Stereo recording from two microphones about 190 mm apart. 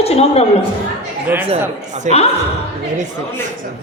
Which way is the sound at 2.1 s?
40° right (ahead or behind).